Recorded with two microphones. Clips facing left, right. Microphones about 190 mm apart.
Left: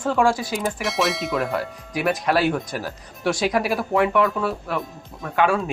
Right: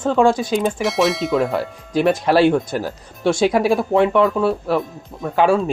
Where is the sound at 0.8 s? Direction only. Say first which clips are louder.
Right 5 dB; centre (ahead or behind).